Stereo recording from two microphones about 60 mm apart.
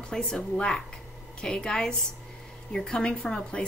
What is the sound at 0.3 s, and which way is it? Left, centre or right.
A woman's voice, centre.